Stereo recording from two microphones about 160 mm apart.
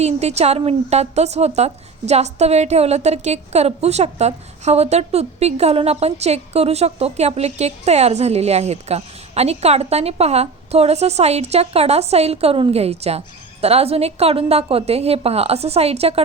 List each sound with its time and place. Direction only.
0.0 s a woman's voice: 40° right (ahead or behind)